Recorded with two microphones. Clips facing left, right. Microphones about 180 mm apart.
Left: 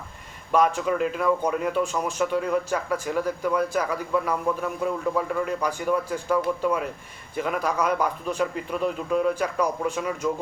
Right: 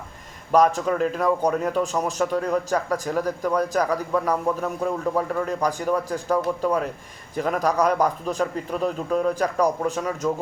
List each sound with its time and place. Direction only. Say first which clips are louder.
0.5 s a man's voice: right 3 dB; 40° right (ahead or behind)